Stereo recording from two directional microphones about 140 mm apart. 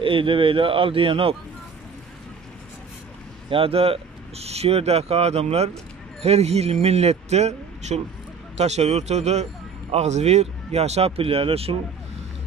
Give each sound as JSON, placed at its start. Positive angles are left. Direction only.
{"t": 0.0, "sound": "speech", "side_deg": -40}
{"t": 3.4, "sound": "a man's voice", "side_deg": -40}